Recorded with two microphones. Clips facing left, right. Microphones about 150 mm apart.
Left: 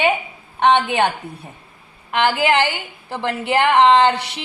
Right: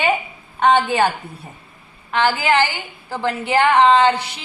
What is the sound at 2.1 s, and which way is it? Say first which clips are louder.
A woman's voice: even; 20° left (ahead or behind).